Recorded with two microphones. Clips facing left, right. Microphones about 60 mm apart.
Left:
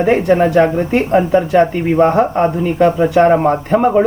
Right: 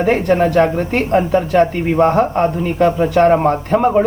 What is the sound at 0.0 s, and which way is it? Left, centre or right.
Speech, centre.